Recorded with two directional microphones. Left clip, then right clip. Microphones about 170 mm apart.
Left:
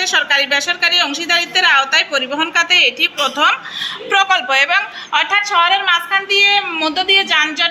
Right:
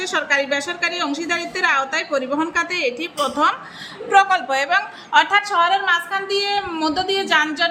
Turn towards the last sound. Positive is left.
turn(degrees=-30)  # may be behind; listen again after turning